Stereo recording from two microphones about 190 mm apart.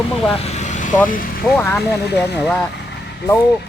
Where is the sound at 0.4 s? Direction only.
35° left (ahead or behind).